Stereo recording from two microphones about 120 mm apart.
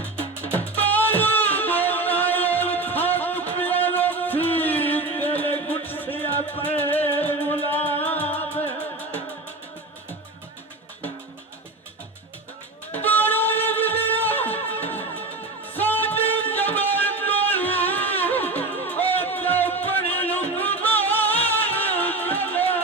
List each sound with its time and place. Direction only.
0.5 s music: 15° left (ahead or behind)
13.1 s music: 15° left (ahead or behind)